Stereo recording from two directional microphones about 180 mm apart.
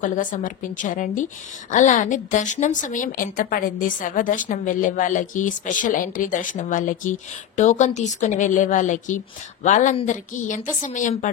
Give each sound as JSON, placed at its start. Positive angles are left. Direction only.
{"t": 0.0, "sound": "a woman's voice", "side_deg": 45}